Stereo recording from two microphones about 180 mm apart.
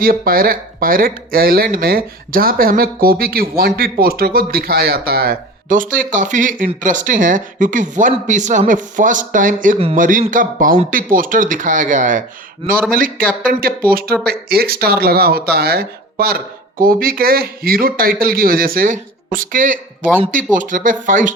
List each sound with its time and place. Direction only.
0.0 s a woman's voice: 55° right (ahead or behind)